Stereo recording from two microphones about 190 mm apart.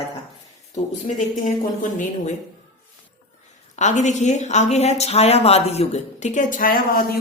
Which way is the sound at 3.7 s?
40° left (ahead or behind).